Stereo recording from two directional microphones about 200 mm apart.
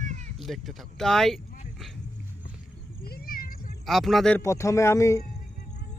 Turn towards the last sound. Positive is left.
turn(degrees=15)  # may be behind; listen again after turning